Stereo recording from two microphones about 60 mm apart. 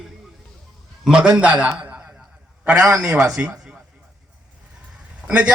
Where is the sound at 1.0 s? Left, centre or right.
Centre.